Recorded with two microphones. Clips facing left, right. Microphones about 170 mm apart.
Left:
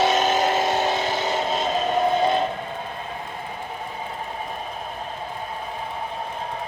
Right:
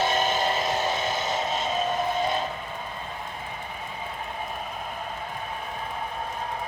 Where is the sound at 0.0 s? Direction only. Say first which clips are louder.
Left 5 dB; 90° left; by 1.6 s 75° left (ahead or behind).